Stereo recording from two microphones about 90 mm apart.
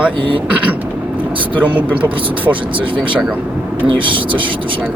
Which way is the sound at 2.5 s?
70° right (ahead or behind).